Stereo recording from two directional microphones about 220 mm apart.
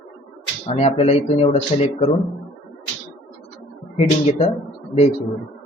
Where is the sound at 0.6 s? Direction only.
30° left (ahead or behind).